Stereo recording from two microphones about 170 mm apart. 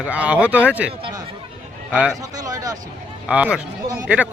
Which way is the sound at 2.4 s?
20° right (ahead or behind).